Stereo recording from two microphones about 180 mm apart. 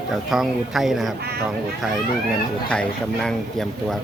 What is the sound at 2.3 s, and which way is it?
Speech, 5° left (ahead or behind).